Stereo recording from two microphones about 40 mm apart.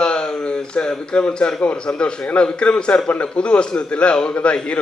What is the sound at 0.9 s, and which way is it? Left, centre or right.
A man's voice, left.